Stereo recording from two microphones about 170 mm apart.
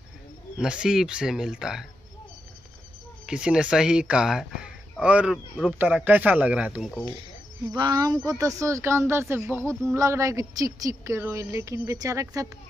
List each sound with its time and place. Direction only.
0.6 s speech: 5° right (ahead or behind)
3.3 s speech: 5° right (ahead or behind)
7.7 s a woman's voice: 25° right (ahead or behind)